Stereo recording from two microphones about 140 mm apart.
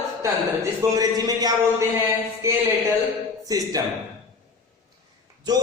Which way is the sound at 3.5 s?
25° right (ahead or behind).